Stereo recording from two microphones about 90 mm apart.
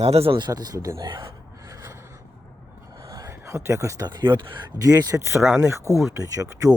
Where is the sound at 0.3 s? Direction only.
50° right (ahead or behind).